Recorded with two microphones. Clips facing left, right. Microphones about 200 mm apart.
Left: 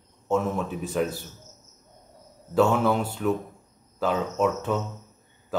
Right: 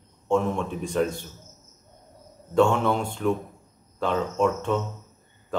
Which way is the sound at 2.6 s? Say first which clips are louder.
Even; 5° left (ahead or behind).